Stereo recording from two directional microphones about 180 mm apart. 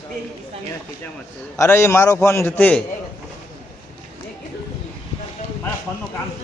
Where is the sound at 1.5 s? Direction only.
15° left (ahead or behind).